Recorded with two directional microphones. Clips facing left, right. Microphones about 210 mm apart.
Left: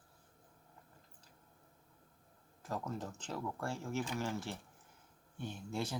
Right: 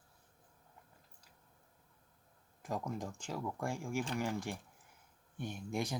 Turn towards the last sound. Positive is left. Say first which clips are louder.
# right 2 dB
turn(degrees=-15)  # may be behind; listen again after turning